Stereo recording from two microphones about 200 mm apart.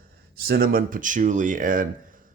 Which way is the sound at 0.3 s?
50° right (ahead or behind).